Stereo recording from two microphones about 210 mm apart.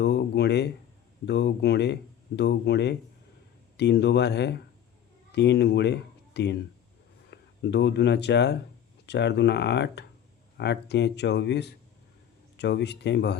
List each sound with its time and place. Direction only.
0.0 s speech: 50° left (ahead or behind)